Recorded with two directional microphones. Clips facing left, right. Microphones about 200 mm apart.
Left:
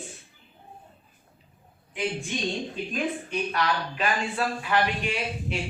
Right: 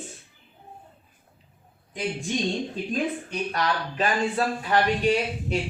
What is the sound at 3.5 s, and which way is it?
Speech, 40° right (ahead or behind).